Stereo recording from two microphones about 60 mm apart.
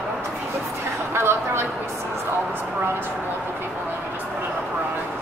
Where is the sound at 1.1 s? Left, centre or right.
Right.